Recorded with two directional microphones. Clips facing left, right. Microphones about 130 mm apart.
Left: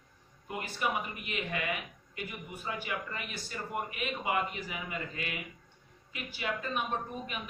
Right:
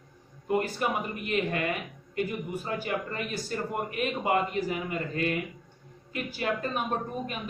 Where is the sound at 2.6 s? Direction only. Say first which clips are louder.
Right 3 dB; 45° right (ahead or behind).